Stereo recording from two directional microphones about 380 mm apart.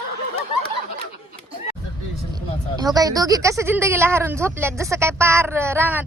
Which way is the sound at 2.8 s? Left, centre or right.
Centre.